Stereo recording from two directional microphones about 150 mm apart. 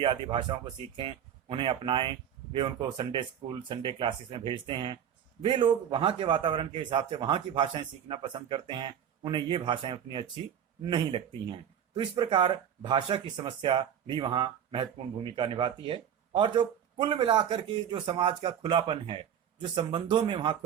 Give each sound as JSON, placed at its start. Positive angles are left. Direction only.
{"t": 0.0, "sound": "speech", "side_deg": -30}